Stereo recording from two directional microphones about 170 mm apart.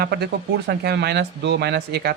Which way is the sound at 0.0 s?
70° right (ahead or behind).